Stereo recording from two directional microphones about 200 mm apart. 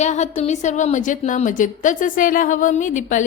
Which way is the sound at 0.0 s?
35° left (ahead or behind).